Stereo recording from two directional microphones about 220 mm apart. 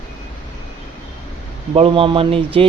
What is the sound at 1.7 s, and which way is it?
Speech, 25° right (ahead or behind).